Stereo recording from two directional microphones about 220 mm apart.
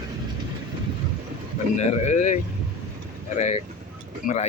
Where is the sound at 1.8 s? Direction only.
30° left (ahead or behind).